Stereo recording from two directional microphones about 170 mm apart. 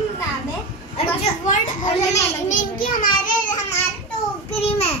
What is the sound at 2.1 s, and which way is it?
A child's voice, 45° left (ahead or behind).